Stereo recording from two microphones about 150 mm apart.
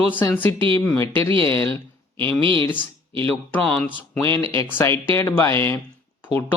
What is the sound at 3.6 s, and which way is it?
Speech, 10° left (ahead or behind).